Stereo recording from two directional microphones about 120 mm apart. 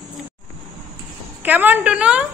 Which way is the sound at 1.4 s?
15° right (ahead or behind).